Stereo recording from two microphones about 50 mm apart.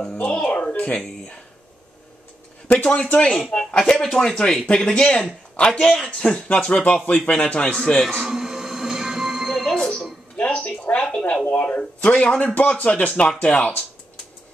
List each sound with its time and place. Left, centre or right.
0.0 s speech: left
2.7 s speech: left
8.2 s music: centre
9.8 s speech: centre
10.3 s speech: left
12.3 s speech: centre
12.5 s speech: left